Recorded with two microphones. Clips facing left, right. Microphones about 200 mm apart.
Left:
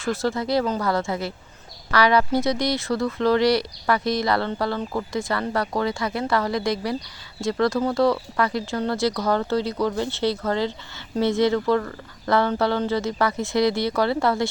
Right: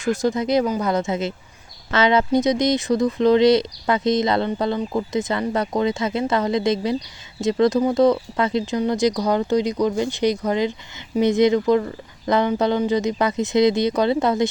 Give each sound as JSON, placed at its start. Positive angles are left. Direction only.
{"t": 0.0, "sound": "speech", "side_deg": -15}